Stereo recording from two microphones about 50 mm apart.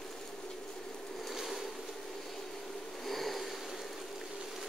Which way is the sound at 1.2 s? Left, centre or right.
Centre.